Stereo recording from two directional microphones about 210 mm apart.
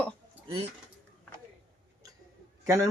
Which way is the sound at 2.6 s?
15° right (ahead or behind).